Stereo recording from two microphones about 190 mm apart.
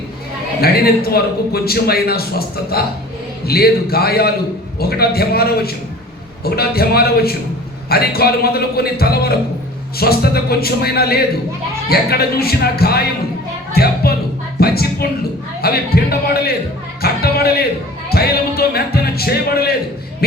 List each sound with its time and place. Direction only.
0.6 s a man's voice: 55° left (ahead or behind)
14.6 s a sound: 55° left (ahead or behind)
15.6 s a man's voice: 55° left (ahead or behind)